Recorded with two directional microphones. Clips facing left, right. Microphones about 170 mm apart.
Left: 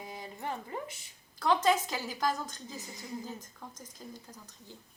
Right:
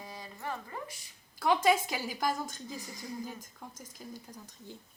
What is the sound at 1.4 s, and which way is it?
A woman's voice, 10° right (ahead or behind).